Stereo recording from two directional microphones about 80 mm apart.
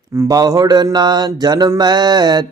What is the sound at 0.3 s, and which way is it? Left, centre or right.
Mantra, right.